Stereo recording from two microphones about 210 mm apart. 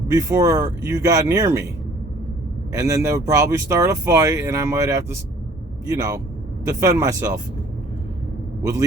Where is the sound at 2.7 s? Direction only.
15° right (ahead or behind).